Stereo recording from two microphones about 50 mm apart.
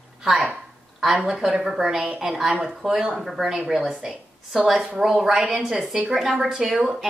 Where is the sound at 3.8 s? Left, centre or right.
Centre.